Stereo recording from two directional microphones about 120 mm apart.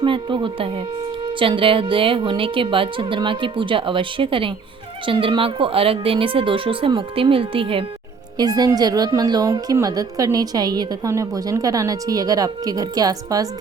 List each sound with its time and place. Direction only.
0.0 s speech: 45° right (ahead or behind)
8.4 s a woman's voice: 35° right (ahead or behind)